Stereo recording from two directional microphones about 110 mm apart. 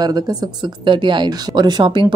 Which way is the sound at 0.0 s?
40° right (ahead or behind).